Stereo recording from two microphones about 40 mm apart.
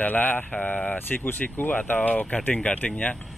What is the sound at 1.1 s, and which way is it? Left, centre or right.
Speech, left.